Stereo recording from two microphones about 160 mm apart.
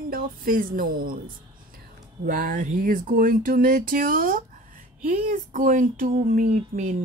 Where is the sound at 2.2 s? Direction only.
55° right (ahead or behind).